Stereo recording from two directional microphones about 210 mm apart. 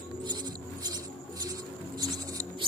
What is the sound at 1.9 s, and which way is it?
Mouse, 20° right (ahead or behind).